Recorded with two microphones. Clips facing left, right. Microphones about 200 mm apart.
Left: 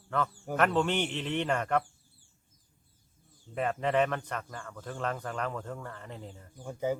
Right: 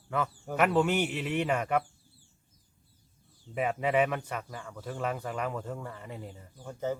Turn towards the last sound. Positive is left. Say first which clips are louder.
# left 2 dB
turn(degrees=10)  # may be behind; listen again after turning